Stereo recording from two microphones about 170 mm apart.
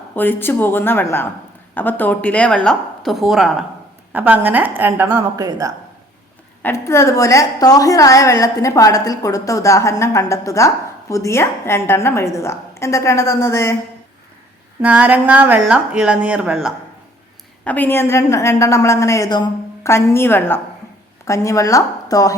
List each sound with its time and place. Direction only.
0.2 s a woman's voice: 10° left (ahead or behind); by 5.7 s 20° right (ahead or behind)
6.6 s a woman's voice: 15° left (ahead or behind)
14.8 s speech: 10° right (ahead or behind)
17.7 s a woman's voice: 10° left (ahead or behind)